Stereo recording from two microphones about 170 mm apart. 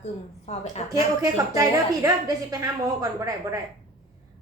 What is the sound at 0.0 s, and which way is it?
Speech, 40° left (ahead or behind).